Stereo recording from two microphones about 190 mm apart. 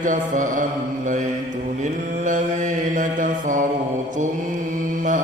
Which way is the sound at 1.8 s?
40° right (ahead or behind).